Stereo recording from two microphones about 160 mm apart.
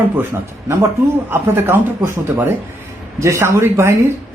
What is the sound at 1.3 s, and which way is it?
Speech, 15° right (ahead or behind).